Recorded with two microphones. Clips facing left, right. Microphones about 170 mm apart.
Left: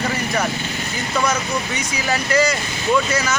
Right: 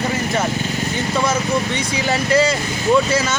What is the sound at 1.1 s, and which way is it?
Speech, 25° right (ahead or behind).